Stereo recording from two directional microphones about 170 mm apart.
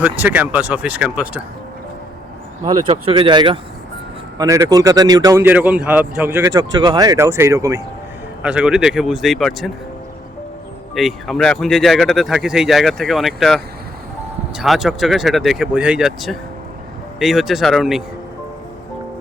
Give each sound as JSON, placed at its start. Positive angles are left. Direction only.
{"t": 0.0, "sound": "speech", "side_deg": -10}
{"t": 2.6, "sound": "speech", "side_deg": -30}
{"t": 4.4, "sound": "speech", "side_deg": -20}
{"t": 8.4, "sound": "speech", "side_deg": -5}
{"t": 10.9, "sound": "speech", "side_deg": 0}